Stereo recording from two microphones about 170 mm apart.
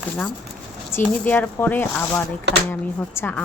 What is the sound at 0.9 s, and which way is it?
Speech, 10° left (ahead or behind).